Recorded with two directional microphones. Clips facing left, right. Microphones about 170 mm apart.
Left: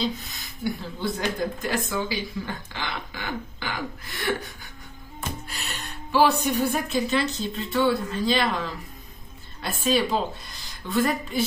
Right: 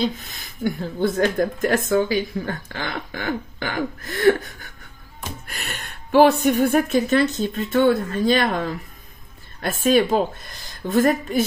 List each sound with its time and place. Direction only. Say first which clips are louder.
0.0 s speech: right 4 dB; 50° right (ahead or behind)
5.5 s speech: right 2 dB; 55° right (ahead or behind)